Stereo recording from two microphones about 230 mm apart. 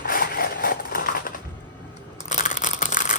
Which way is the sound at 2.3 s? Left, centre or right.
Left.